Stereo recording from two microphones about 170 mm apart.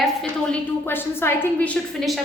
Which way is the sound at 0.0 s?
5° left (ahead or behind).